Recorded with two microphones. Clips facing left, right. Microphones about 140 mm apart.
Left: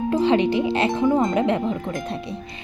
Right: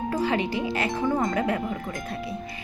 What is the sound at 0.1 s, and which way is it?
Speech, 25° left (ahead or behind).